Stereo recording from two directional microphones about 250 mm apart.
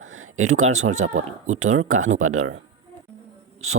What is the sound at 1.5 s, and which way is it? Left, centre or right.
Speech, right.